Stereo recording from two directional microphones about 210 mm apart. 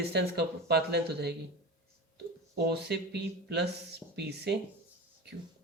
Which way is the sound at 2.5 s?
50° right (ahead or behind).